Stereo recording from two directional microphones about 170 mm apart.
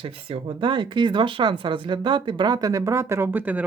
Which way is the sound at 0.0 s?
35° right (ahead or behind).